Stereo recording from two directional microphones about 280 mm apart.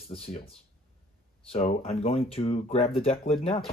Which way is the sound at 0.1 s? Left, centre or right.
Left.